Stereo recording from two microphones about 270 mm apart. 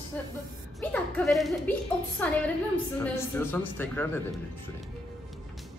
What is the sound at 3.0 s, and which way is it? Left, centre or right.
Speech, centre.